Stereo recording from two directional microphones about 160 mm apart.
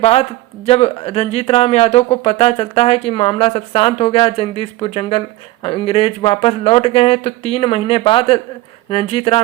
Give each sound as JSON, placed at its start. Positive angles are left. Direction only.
{"t": 0.0, "sound": "speech", "side_deg": 40}